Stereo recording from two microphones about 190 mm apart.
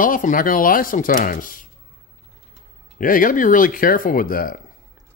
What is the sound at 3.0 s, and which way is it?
Speech, 45° left (ahead or behind).